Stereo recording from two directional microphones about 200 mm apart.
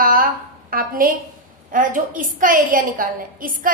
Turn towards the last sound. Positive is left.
turn(degrees=-45)  # may be behind; listen again after turning